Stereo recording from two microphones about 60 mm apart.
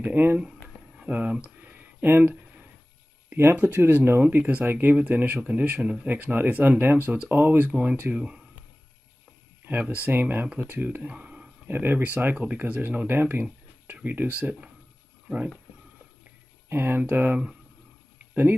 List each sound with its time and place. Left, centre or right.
0.0 s speech: right
0.9 s speech: centre
1.6 s a sound: right
2.2 s a sound: right
3.5 s speech: right
5.4 s speech: centre
9.7 s speech: right
11.6 s speech: right
16.6 s speech: right
17.0 s speech: right